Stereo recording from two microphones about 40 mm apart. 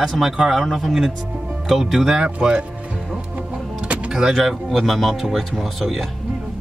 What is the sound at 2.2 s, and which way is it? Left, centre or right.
Speech, right.